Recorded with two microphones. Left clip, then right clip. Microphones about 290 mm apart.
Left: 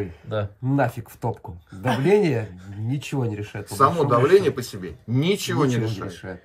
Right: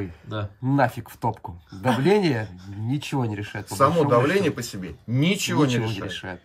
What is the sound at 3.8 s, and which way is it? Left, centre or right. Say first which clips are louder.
Speech: even; centre.